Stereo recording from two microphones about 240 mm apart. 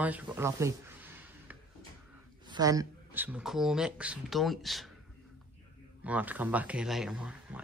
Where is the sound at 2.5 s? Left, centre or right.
Centre.